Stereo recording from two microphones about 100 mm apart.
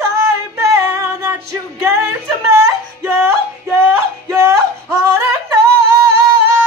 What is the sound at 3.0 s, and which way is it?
Music, 25° right (ahead or behind).